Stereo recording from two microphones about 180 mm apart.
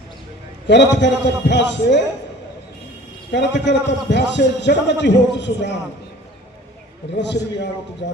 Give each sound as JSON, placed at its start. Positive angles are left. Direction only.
{"t": 0.7, "sound": "a man's voice", "side_deg": 75}
{"t": 3.3, "sound": "a man's voice", "side_deg": 75}
{"t": 7.2, "sound": "a man's voice", "side_deg": 75}